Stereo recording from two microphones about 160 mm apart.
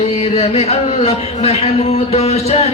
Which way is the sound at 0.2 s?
40° left (ahead or behind).